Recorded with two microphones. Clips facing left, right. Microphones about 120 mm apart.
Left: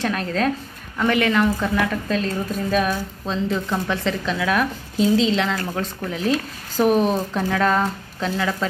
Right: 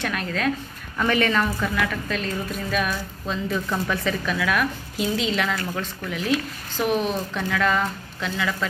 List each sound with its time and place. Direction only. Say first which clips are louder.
0.0 s speech: left 4 dB; 30° left (ahead or behind)
0.9 s a woman's voice: left 2 dB; 15° left (ahead or behind)
5.6 s speech: left 3 dB; 35° left (ahead or behind)